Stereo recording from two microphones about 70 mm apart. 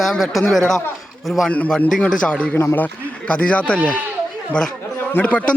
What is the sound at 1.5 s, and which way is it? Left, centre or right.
A man's voice, centre.